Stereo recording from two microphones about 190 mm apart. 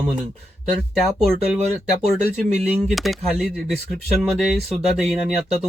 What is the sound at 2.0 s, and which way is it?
Speech, 35° right (ahead or behind).